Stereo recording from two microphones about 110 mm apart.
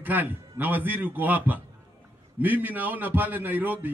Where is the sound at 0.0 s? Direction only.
15° right (ahead or behind).